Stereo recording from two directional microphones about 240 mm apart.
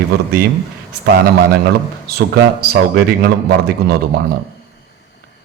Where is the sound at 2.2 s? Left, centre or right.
Right.